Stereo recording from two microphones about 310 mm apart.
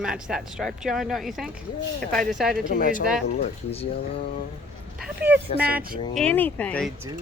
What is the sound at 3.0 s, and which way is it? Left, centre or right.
Speech, centre.